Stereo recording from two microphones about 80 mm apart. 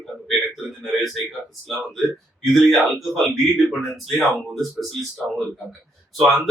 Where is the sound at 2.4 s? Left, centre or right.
Centre.